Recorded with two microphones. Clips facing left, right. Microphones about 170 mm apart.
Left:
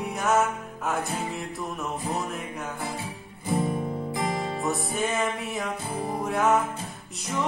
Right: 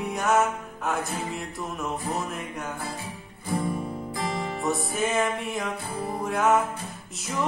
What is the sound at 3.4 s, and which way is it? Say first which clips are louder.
Music: left 2 dB; 25° left (ahead or behind).